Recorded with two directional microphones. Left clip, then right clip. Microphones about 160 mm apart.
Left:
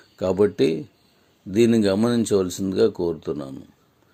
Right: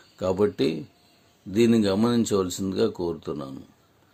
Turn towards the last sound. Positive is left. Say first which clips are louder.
# left 4 dB
turn(degrees=15)  # may be behind; listen again after turning